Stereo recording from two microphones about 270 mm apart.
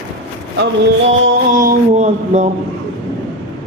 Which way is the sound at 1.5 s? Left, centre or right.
Right.